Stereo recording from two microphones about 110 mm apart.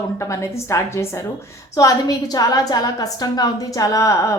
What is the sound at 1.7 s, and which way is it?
A woman's voice, 35° left (ahead or behind).